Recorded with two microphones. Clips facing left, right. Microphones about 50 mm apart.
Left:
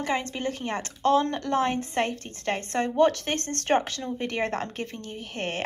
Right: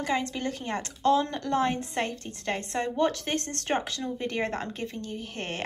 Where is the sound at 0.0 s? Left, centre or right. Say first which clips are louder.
Left 1 dB; left.